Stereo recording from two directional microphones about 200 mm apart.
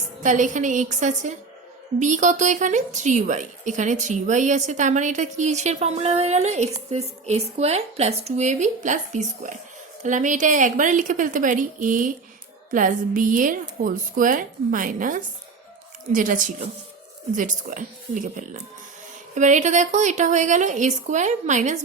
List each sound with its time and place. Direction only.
0.2 s speech: 40° right (ahead or behind)